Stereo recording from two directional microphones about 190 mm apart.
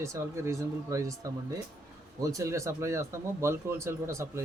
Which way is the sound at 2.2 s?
15° right (ahead or behind).